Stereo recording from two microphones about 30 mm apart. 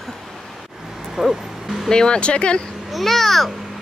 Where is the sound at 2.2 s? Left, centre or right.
Left.